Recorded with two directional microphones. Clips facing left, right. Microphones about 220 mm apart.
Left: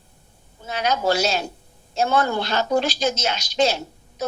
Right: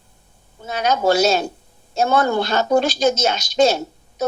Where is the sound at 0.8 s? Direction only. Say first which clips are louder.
Right 5 dB; 45° right (ahead or behind).